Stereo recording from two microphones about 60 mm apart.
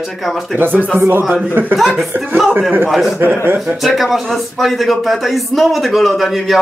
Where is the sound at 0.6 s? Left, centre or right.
Right.